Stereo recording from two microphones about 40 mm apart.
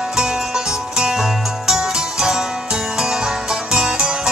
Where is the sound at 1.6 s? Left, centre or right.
Centre.